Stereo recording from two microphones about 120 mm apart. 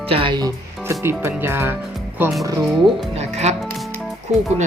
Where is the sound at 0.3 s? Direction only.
30° right (ahead or behind).